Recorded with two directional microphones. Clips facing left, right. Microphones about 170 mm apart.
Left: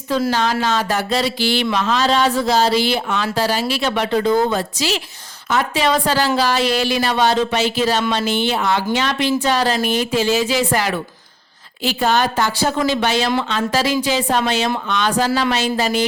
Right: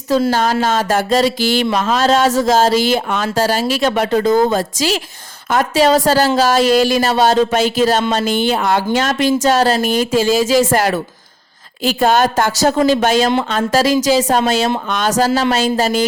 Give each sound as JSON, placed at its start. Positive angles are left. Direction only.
{"t": 0.3, "sound": "a woman's voice", "side_deg": -45}